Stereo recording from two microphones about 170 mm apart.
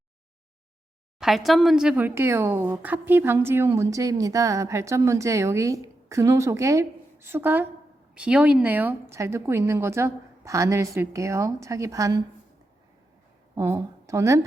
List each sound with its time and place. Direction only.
1.2 s speech: centre (ahead or behind); by 12.2 s 20° right (ahead or behind)
13.6 s speech: 15° right (ahead or behind)